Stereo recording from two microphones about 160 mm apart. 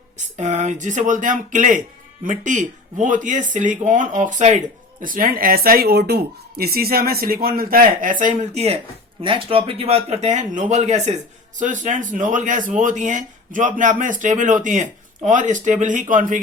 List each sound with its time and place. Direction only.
0.3 s speech: 45° right (ahead or behind)
4.9 s speech: 60° right (ahead or behind)